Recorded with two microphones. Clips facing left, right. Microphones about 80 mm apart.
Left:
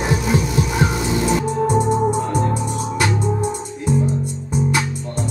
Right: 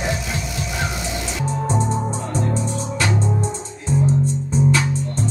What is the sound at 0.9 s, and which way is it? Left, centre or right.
Music, left.